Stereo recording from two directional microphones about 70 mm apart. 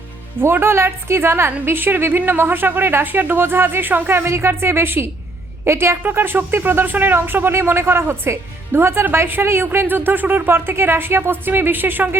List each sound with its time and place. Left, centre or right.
0.4 s a woman's voice: right
4.2 s a woman's voice: right